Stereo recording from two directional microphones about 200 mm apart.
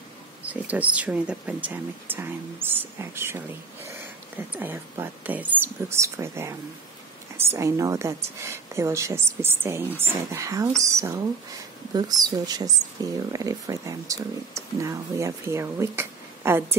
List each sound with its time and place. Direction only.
0.5 s speech: 10° right (ahead or behind)